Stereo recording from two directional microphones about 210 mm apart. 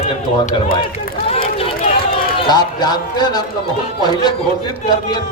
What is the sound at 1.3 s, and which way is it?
Run, 25° left (ahead or behind).